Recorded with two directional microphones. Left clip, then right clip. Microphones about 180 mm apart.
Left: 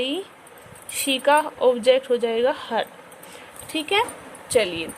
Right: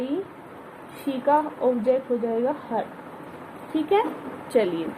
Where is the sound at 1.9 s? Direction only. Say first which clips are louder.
Left 4 dB; 55° left (ahead or behind).